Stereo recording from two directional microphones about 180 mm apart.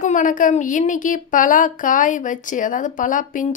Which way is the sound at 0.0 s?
45° left (ahead or behind).